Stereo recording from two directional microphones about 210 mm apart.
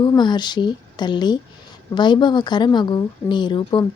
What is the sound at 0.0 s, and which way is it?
Speech, 20° left (ahead or behind).